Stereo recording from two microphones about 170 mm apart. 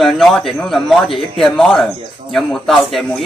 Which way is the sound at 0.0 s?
Centre (ahead or behind).